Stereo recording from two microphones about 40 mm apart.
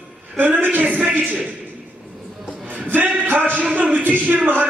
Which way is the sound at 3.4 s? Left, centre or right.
Right.